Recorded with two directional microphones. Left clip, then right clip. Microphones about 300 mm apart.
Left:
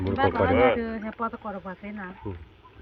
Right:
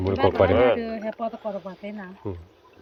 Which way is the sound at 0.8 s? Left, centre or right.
Left.